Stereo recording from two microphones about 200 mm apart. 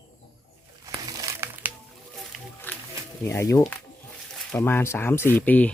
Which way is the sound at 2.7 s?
10° left (ahead or behind).